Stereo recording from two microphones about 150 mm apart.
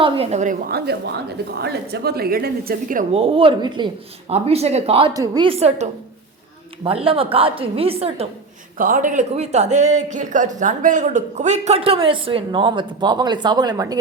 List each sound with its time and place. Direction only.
0.0 s speech: 45° right (ahead or behind)
0.7 s speech: 90° right
3.1 s a woman's voice: 40° right (ahead or behind)
4.3 s speech: 45° right (ahead or behind)
5.1 s a woman's voice: 25° right (ahead or behind)
5.5 s speech: 45° right (ahead or behind)
6.8 s a woman's voice: 35° right (ahead or behind)
8.8 s speech: 65° right (ahead or behind); by 14.0 s 25° right (ahead or behind)